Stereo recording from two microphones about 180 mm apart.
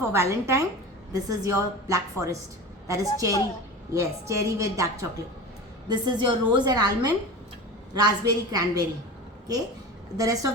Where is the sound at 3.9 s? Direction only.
15° right (ahead or behind).